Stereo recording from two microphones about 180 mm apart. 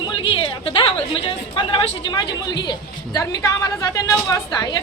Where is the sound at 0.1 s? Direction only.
30° left (ahead or behind).